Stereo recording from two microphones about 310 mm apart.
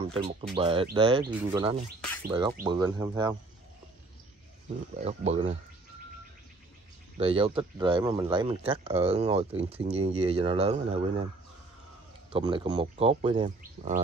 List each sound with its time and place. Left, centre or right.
0.0 s speech: centre
5.0 s speech: right
7.2 s speech: centre
12.3 s speech: centre